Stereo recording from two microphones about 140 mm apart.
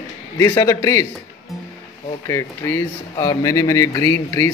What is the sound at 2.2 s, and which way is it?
Speech, 20° left (ahead or behind).